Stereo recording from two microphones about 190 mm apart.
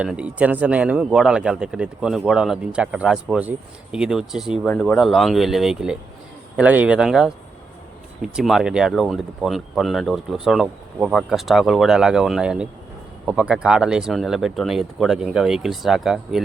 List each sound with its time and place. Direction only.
0.0 s speech: 5° right (ahead or behind)